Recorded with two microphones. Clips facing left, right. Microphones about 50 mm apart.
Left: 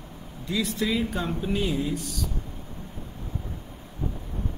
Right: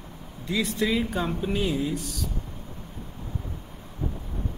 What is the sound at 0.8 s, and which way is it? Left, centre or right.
A man's voice, centre.